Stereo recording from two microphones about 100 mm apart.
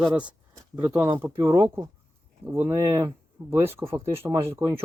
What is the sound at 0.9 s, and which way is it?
Speech, 25° right (ahead or behind).